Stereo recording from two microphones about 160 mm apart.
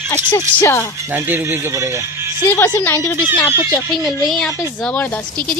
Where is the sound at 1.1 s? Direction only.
15° right (ahead or behind).